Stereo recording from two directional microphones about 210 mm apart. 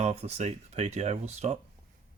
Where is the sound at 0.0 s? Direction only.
30° right (ahead or behind).